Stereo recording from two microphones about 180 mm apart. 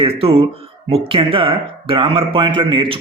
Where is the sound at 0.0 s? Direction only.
30° right (ahead or behind).